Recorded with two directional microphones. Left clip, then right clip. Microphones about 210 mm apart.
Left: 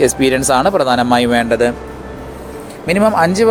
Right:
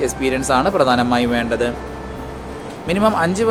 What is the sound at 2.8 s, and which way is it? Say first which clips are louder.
Speech: left 5 dB; 25° left (ahead or behind).